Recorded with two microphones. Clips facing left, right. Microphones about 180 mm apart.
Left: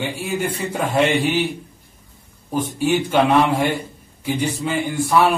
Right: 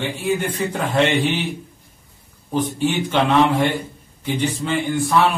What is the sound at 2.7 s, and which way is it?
Speech, 10° left (ahead or behind).